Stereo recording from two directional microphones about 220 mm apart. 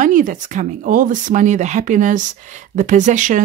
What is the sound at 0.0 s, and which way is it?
Speech, 35° right (ahead or behind).